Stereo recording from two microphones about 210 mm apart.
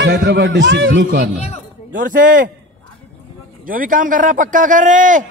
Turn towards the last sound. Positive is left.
turn(degrees=-35)  # may be behind; listen again after turning